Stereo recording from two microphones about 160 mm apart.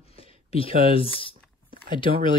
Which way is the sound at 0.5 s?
35° left (ahead or behind).